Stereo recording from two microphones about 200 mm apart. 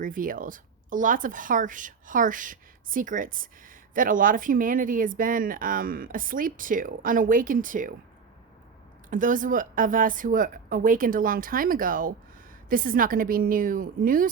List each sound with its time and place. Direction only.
0.0 s a woman's voice: 45° right (ahead or behind)
9.0 s speech: 40° right (ahead or behind)